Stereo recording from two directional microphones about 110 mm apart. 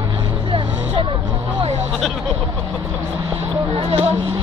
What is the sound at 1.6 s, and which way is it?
Speech, 90° right.